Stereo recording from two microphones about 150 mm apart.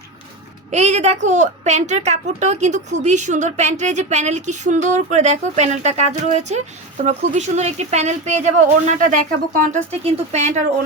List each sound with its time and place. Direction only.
0.7 s a woman's voice: 50° right (ahead or behind); by 9.6 s 65° right (ahead or behind)
9.9 s a woman's voice: 45° right (ahead or behind)